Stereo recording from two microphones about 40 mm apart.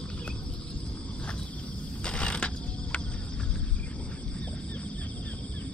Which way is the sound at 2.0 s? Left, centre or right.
Left.